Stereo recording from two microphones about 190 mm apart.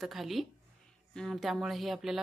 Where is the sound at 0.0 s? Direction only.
Centre (ahead or behind).